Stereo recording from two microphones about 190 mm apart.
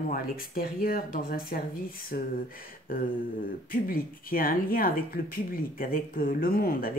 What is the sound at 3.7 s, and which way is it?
Speech, 50° left (ahead or behind).